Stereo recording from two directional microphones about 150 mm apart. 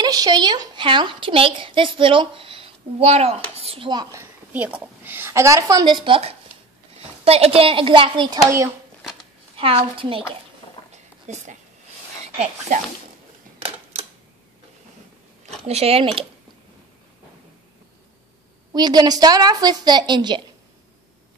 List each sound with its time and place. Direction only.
0.0 s a woman's voice: 25° right (ahead or behind)
9.6 s a woman's voice: 40° right (ahead or behind)
10.9 s a sound: 50° right (ahead or behind)
12.4 s speech: 55° right (ahead or behind)
15.6 s a woman's voice: 45° right (ahead or behind)
18.7 s a woman's voice: 25° right (ahead or behind)